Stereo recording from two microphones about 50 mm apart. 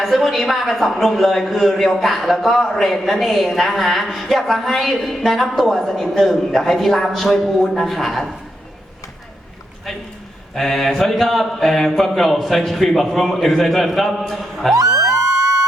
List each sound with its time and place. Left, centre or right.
0.0 s a woman's voice: centre
10.5 s a woman's voice: centre
15.1 s music: right